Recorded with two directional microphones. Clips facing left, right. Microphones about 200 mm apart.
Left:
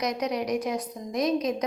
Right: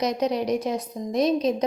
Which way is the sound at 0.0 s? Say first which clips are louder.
Right 4 dB; 25° right (ahead or behind).